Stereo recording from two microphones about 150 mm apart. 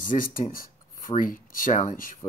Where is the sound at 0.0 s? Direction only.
65° left (ahead or behind).